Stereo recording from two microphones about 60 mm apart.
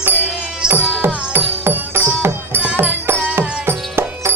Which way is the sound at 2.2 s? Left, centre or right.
Right.